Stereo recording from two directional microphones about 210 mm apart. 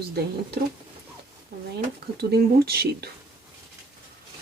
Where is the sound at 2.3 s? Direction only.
50° right (ahead or behind).